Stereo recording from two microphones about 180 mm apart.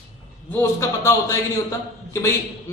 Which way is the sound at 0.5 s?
15° left (ahead or behind).